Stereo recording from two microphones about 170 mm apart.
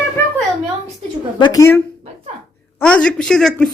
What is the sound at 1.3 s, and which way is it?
Speech, 25° left (ahead or behind).